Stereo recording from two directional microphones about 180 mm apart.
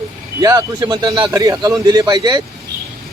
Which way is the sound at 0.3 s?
20° right (ahead or behind).